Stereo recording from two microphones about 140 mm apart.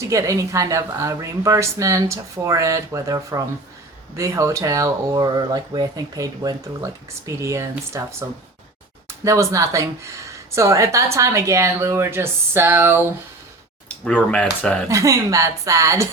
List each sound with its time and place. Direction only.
0.0 s speech: 25° right (ahead or behind)
9.2 s speech: 20° right (ahead or behind)
13.8 s speech: 10° left (ahead or behind)
14.8 s speech: 20° right (ahead or behind)